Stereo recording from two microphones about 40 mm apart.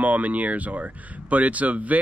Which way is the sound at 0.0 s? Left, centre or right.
Right.